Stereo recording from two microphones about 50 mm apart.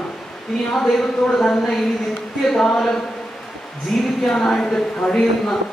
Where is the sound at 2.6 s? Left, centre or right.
Centre.